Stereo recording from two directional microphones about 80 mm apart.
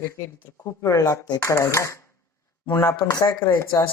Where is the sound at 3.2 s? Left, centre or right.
Left.